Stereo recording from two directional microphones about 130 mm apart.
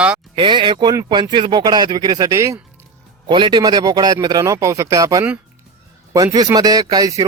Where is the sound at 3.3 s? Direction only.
35° right (ahead or behind).